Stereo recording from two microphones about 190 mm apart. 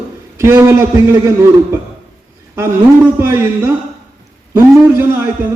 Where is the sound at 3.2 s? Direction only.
15° right (ahead or behind).